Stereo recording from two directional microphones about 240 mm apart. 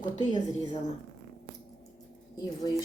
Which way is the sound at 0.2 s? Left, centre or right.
Centre.